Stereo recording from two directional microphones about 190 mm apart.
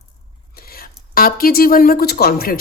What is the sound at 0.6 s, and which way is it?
A woman's voice, 50° left (ahead or behind).